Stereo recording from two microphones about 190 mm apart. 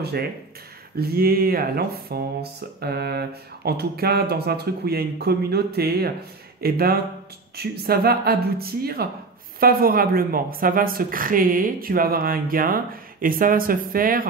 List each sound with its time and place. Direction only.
0.9 s speech: 50° right (ahead or behind)